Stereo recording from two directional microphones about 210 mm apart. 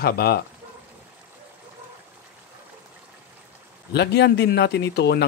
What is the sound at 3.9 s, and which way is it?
Speech, 55° left (ahead or behind).